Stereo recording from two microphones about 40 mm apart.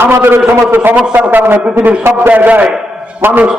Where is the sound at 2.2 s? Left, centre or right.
Right.